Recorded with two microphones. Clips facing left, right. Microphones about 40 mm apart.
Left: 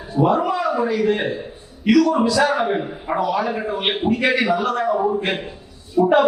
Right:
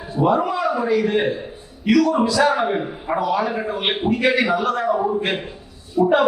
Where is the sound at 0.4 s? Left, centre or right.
Centre.